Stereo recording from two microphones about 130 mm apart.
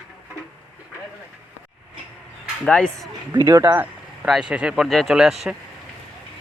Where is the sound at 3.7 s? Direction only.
15° right (ahead or behind).